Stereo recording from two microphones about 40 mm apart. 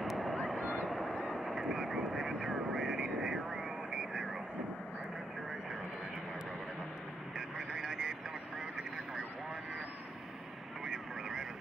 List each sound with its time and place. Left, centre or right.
0.0 s a sound: centre
0.6 s a sound: right
0.8 s honk: centre
1.1 s vehicle: centre
7.3 s vehicle: centre
10.9 s vehicle: centre